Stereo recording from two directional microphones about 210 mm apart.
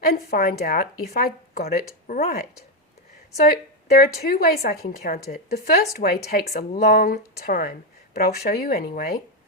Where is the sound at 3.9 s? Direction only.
45° left (ahead or behind).